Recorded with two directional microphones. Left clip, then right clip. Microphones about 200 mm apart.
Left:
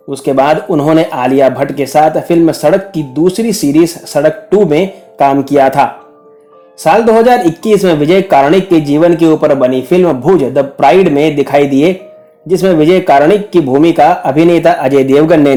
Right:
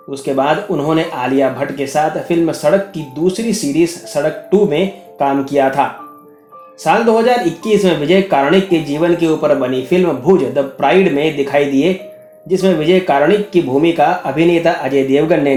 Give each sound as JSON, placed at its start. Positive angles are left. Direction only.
{"t": 0.1, "sound": "speech", "side_deg": 50}
{"t": 7.6, "sound": "speech", "side_deg": 50}